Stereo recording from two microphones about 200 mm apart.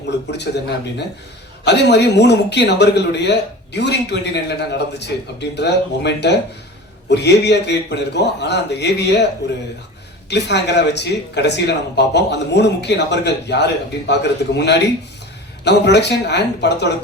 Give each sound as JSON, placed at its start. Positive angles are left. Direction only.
{"t": 0.3, "sound": "speech", "side_deg": 60}
{"t": 10.2, "sound": "speech", "side_deg": 60}